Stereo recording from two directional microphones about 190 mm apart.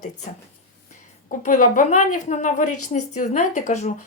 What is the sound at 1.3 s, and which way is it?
A woman's voice, 45° left (ahead or behind).